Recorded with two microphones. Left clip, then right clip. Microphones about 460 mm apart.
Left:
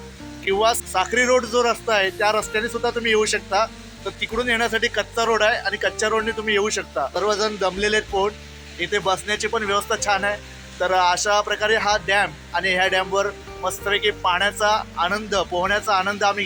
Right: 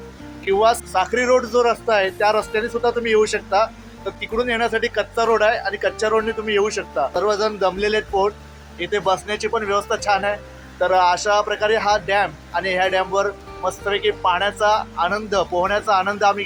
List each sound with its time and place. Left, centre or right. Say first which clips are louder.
0.4 s speech: right 3 dB; left